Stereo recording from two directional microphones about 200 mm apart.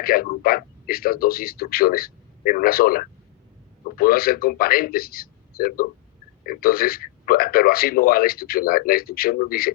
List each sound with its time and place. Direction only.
0.0 s a man's voice: 45° left (ahead or behind)